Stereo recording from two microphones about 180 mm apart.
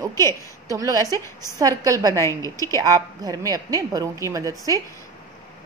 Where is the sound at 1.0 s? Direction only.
15° left (ahead or behind).